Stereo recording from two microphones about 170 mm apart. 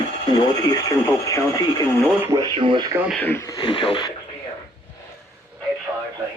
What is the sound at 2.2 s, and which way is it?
Speech, 15° right (ahead or behind).